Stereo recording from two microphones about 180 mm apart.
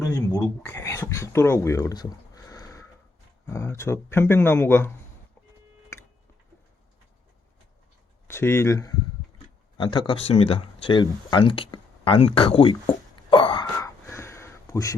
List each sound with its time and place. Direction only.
0.0 s speech: 15° left (ahead or behind)
8.3 s speech: 15° left (ahead or behind); by 12.7 s 30° left (ahead or behind)
13.1 s wail: 25° left (ahead or behind)
13.7 s a sound: 15° left (ahead or behind)